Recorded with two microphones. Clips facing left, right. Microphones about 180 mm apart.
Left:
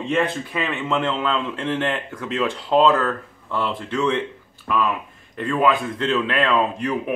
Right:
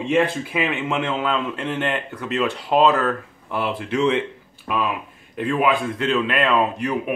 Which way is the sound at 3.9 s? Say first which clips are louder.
Right 2 dB; 15° right (ahead or behind).